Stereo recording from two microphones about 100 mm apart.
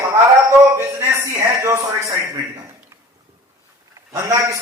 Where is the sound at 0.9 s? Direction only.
30° right (ahead or behind).